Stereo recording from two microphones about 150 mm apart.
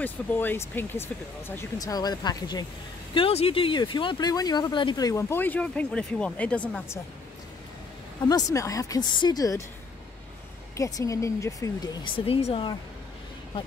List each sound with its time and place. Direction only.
0.0 s speech: 10° left (ahead or behind)
3.2 s speech: 40° left (ahead or behind); by 7.0 s 10° left (ahead or behind)
8.2 s speech: 25° left (ahead or behind)
10.8 s speech: 20° left (ahead or behind)
12.3 s speech: 40° left (ahead or behind)